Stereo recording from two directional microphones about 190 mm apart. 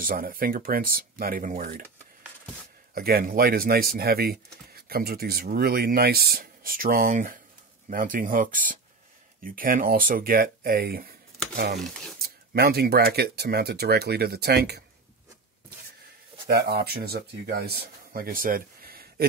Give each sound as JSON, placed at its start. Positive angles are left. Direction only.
{"t": 0.0, "sound": "speech", "side_deg": -50}
{"t": 2.9, "sound": "speech", "side_deg": -50}
{"t": 16.4, "sound": "speech", "side_deg": -55}